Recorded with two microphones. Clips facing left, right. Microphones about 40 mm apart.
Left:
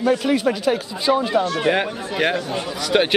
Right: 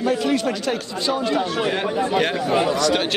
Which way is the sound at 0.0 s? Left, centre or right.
Centre.